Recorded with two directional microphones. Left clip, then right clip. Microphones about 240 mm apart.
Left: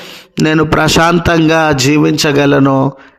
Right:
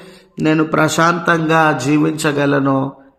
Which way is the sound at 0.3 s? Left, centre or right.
Left.